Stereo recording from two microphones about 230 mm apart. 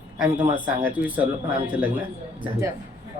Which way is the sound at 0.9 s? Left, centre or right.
Centre.